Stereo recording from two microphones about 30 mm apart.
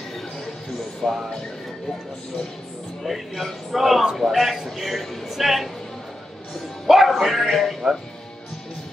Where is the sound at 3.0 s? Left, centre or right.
Centre.